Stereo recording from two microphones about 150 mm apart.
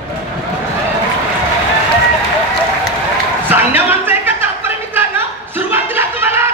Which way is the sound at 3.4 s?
15° right (ahead or behind).